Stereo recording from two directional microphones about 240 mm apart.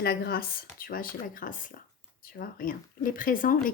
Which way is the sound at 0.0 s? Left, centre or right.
Left.